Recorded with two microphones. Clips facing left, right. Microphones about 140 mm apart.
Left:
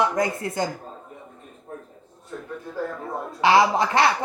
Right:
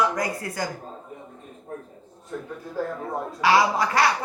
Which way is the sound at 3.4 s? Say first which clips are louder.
Left 2 dB; 25° left (ahead or behind).